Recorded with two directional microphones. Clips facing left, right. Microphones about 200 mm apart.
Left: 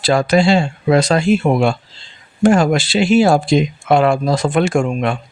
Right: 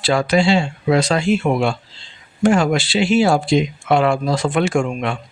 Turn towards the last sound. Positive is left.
turn(degrees=45)  # may be behind; listen again after turning